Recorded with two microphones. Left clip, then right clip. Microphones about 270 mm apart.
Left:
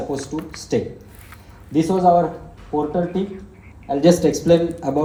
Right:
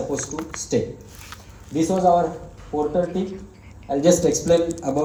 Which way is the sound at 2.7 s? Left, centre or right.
Left.